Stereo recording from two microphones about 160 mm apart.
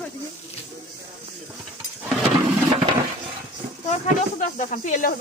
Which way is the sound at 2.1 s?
Centre (ahead or behind).